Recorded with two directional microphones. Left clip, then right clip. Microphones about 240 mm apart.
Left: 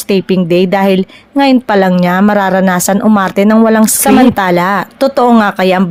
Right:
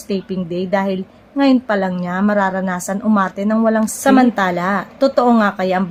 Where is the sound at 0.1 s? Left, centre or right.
Left.